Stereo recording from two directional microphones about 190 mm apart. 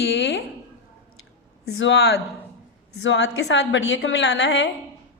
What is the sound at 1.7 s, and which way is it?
A woman's voice, 80° left.